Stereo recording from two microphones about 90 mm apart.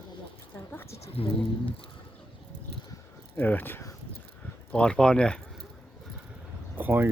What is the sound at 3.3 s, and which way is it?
Speech, 20° left (ahead or behind).